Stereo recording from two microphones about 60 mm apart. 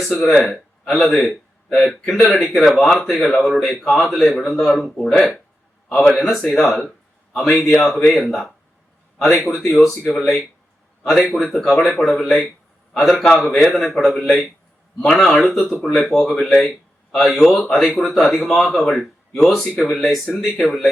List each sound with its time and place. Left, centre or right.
0.0 s a man's voice: centre
5.9 s a man's voice: centre